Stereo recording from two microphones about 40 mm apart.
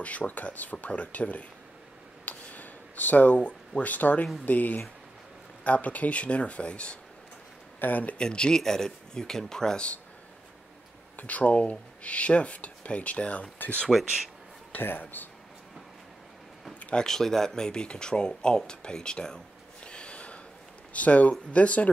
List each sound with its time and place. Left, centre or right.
0.0 s speech: left
2.2 s a sound: left
3.8 s speech: left
7.8 s speech: left
8.2 s speech: left
11.1 s speech: left
13.9 s speech: centre
14.8 s speech: left
16.9 s speech: centre
18.7 s a sound: left
20.9 s speech: left